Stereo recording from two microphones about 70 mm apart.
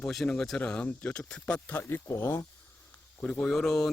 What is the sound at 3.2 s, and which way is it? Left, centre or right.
Speech, centre.